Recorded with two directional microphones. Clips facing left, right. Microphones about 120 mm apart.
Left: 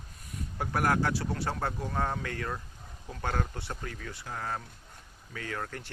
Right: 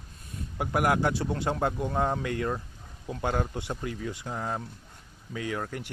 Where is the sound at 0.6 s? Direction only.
15° right (ahead or behind).